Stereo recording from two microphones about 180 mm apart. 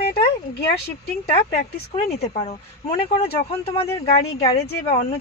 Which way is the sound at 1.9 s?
35° left (ahead or behind).